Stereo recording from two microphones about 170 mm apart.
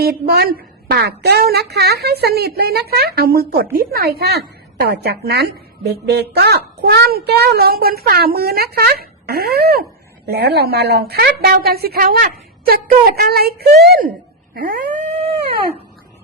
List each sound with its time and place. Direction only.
0.0 s a woman's voice: 65° right (ahead or behind)
14.5 s dog: 55° right (ahead or behind)